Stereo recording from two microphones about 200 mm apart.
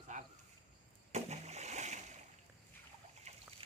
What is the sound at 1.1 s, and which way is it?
Rowboat, 35° right (ahead or behind).